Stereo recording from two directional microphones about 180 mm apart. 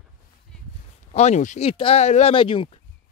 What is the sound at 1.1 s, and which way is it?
Speech, 40° left (ahead or behind).